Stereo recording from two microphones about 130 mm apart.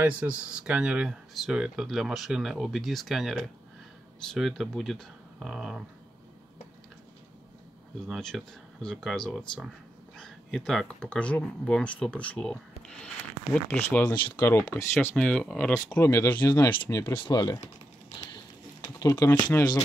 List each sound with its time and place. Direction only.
0.0 s speech: 10° right (ahead or behind)
8.1 s speech: centre (ahead or behind); by 15.0 s 20° left (ahead or behind)
15.1 s speech: 5° left (ahead or behind)
16.0 s speech: 20° left (ahead or behind)
17.1 s speech: 35° left (ahead or behind)
18.3 s a sound: 30° left (ahead or behind)